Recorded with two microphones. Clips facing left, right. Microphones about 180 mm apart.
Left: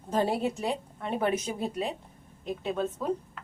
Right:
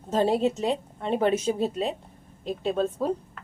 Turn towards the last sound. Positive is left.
turn(degrees=-30)  # may be behind; listen again after turning